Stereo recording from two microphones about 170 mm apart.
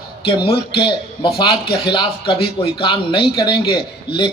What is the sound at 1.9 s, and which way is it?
A man's voice, 30° left (ahead or behind).